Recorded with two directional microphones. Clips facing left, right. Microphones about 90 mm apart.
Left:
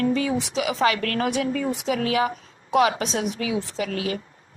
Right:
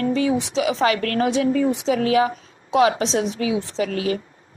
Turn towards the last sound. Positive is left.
turn(degrees=-35)  # may be behind; listen again after turning